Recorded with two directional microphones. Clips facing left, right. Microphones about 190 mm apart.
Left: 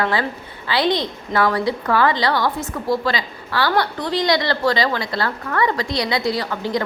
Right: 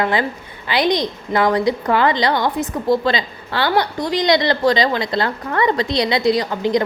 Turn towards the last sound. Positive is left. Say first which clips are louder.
# right 5 dB
turn(degrees=-20)  # may be behind; listen again after turning